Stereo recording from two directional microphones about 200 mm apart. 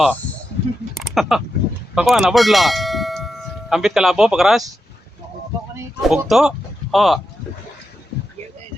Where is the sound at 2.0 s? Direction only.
Centre (ahead or behind).